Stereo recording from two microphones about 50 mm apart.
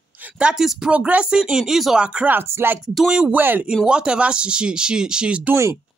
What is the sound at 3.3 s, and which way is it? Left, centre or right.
Speech, right.